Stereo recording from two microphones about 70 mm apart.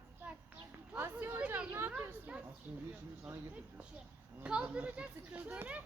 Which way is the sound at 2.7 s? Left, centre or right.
Centre.